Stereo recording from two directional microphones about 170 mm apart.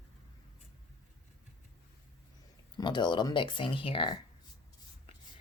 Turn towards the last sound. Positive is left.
turn(degrees=30)  # may be behind; listen again after turning